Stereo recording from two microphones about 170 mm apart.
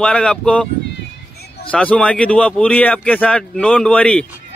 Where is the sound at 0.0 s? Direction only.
5° left (ahead or behind).